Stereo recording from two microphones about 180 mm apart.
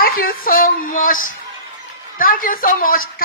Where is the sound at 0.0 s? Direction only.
55° left (ahead or behind).